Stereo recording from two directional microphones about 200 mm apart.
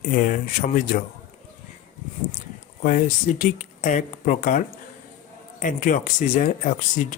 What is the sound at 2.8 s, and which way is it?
Speech, 40° left (ahead or behind).